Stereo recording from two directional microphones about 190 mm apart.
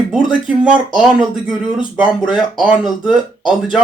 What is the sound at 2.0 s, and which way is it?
Speech, 5° right (ahead or behind).